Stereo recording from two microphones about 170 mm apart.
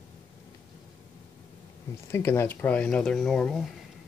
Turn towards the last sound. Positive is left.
turn(degrees=0)  # may be behind; listen again after turning